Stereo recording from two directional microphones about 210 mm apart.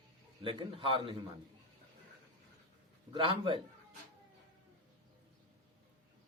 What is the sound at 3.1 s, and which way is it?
Speech, 25° right (ahead or behind).